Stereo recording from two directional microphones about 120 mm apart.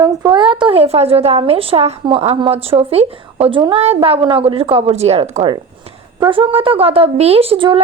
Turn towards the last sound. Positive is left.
turn(degrees=-45)  # may be behind; listen again after turning